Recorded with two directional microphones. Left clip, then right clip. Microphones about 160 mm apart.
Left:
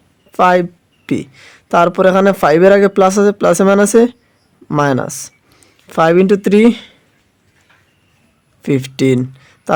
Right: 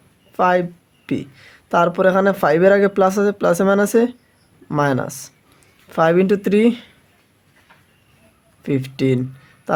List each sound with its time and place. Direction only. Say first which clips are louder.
0.3 s speech: left 6 dB; 40° left (ahead or behind)
8.6 s speech: left 6 dB; 40° left (ahead or behind)